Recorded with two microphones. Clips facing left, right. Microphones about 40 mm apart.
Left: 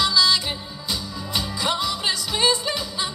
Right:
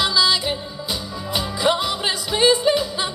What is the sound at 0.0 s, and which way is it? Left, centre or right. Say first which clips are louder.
Music: right 1 dB; centre.